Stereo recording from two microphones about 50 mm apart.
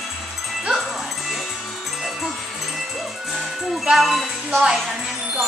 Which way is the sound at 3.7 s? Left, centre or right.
Centre.